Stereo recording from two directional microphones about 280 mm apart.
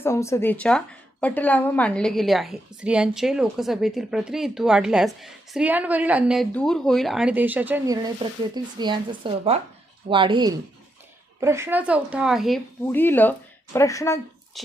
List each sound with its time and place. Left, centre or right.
0.0 s a woman's voice: centre